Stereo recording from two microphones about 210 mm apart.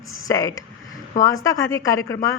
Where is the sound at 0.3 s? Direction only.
15° left (ahead or behind).